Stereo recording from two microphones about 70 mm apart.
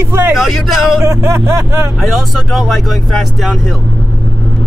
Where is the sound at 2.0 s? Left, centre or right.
Centre.